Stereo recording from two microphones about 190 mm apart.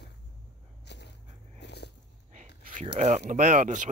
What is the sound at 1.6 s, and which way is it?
Biting, 60° left (ahead or behind).